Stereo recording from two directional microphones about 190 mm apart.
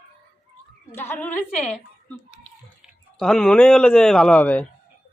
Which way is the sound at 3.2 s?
5° left (ahead or behind).